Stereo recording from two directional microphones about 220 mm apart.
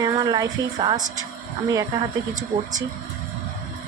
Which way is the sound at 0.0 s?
15° right (ahead or behind).